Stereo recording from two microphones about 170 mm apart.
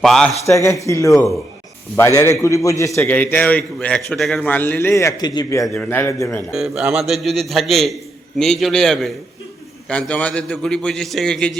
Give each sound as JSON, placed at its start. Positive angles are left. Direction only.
{"t": 0.0, "sound": "a man's voice", "side_deg": 0}
{"t": 0.4, "sound": "a man's voice", "side_deg": 15}
{"t": 5.6, "sound": "a man's voice", "side_deg": 10}
{"t": 6.5, "sound": "a man's voice", "side_deg": -5}